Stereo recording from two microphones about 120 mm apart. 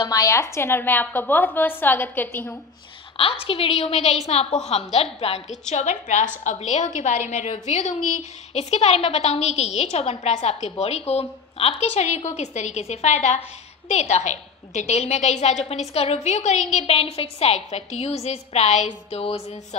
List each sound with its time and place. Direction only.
0.0 s a woman's voice: 30° left (ahead or behind)
3.4 s a woman's voice: 55° left (ahead or behind)